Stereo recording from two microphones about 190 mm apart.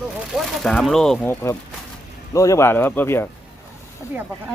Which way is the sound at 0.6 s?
Centre (ahead or behind).